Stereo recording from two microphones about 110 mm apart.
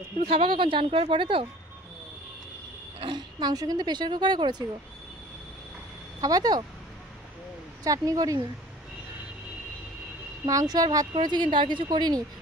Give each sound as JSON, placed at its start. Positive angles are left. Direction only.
{"t": 0.3, "sound": "speech", "side_deg": -50}
{"t": 3.0, "sound": "speech", "side_deg": -45}
{"t": 6.2, "sound": "speech", "side_deg": -35}
{"t": 7.8, "sound": "speech", "side_deg": -30}
{"t": 10.4, "sound": "speech", "side_deg": -35}